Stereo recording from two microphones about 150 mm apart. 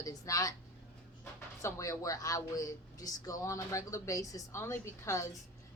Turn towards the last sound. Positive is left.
turn(degrees=20)  # may be behind; listen again after turning